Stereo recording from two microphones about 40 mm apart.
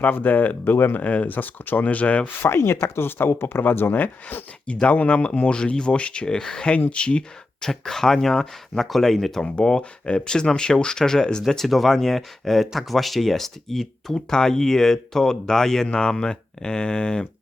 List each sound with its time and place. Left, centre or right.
0.0 s speech: left
0.6 s speech: left
1.0 s speech: left
2.2 s speech: left
3.6 s speech: left
3.9 s speech: left
4.6 s speech: left; by 9.4 s centre
9.4 s speech: left
11.4 s speech: centre